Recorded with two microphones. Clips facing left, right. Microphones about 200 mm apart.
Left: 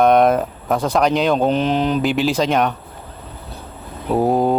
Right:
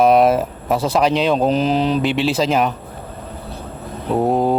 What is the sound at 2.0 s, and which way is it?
Speech, centre (ahead or behind).